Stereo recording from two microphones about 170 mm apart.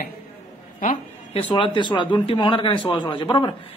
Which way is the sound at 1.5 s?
30° left (ahead or behind).